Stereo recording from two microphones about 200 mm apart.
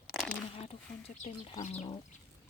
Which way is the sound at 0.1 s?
Centre (ahead or behind).